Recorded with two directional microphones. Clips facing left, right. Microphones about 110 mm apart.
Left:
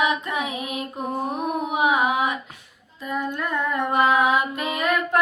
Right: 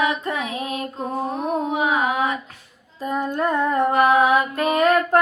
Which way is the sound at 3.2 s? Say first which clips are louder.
Right 5 dB; 40° right (ahead or behind).